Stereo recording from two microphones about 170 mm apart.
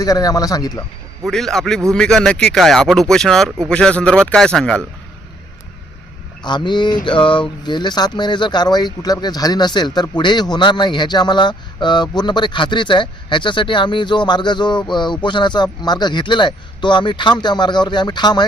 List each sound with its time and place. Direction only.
0.0 s a man's voice: 20° left (ahead or behind)
1.3 s speech: centre (ahead or behind)
6.4 s a man's voice: 25° left (ahead or behind)